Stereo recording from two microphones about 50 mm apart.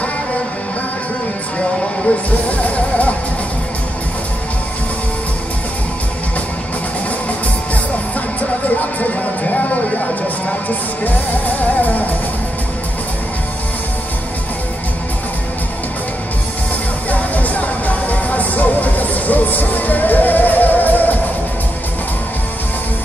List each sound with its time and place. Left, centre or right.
2.6 s music: left
8.6 s a sound: left
17.1 s music: left